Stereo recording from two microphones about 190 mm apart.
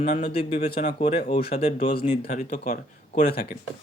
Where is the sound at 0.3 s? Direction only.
30° left (ahead or behind).